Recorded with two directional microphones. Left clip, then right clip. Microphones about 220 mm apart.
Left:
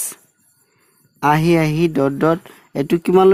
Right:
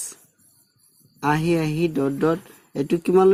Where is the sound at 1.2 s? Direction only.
40° left (ahead or behind).